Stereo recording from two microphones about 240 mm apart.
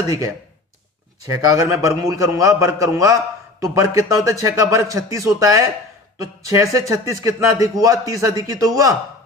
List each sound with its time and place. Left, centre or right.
1.2 s speech: centre